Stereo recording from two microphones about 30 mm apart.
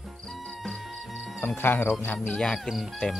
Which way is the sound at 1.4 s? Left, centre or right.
Left.